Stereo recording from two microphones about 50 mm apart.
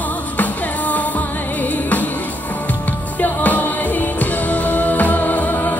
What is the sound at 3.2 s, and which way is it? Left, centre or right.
Music, left.